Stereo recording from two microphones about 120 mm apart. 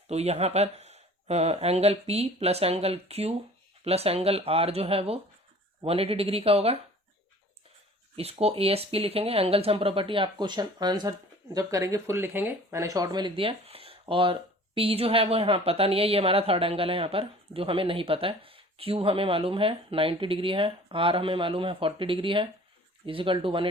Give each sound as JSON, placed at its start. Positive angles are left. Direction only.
{"t": 0.1, "sound": "a woman's voice", "side_deg": -60}
{"t": 8.1, "sound": "a woman's voice", "side_deg": -55}